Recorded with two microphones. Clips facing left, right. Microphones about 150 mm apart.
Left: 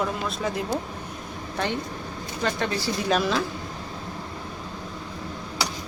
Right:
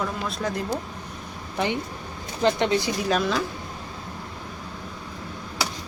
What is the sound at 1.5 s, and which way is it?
Speech, 15° right (ahead or behind).